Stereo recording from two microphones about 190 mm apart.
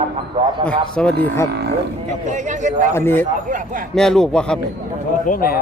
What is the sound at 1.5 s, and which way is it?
Speech, 60° right (ahead or behind).